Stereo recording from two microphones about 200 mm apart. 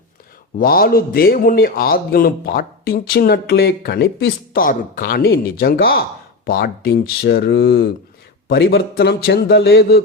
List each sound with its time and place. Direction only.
0.6 s a man's voice: 45° left (ahead or behind)